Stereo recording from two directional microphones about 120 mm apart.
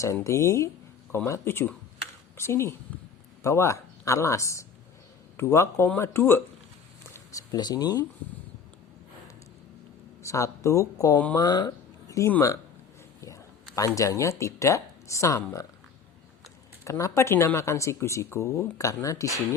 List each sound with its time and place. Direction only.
0.0 s speech: 25° left (ahead or behind)
10.2 s speech: 25° left (ahead or behind)
16.8 s speech: 25° left (ahead or behind)